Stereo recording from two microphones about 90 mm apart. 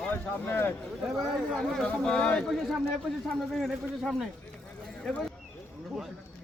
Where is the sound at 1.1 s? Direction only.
5° left (ahead or behind).